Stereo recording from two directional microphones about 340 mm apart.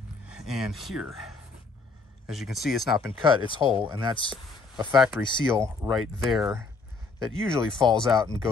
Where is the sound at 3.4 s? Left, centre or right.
Centre.